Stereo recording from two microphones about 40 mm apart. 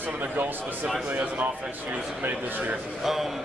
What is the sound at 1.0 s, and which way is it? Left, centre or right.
A man's voice, right.